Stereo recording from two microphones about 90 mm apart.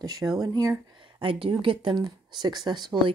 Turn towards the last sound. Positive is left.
turn(degrees=-55)  # may be behind; listen again after turning